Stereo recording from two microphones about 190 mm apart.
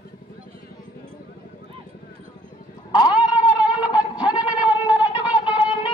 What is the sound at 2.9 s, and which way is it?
Sheep, 20° left (ahead or behind).